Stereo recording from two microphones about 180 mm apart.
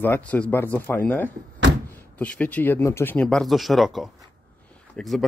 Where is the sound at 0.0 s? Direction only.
10° left (ahead or behind).